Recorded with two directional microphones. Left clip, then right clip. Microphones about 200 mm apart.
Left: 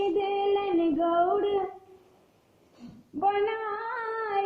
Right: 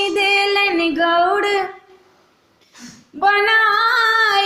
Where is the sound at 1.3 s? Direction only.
5° right (ahead or behind).